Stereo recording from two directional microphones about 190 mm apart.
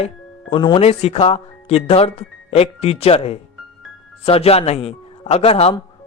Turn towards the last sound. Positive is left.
turn(degrees=30)  # may be behind; listen again after turning